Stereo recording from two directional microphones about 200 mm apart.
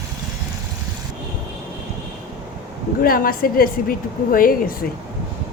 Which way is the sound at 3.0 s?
45° left (ahead or behind).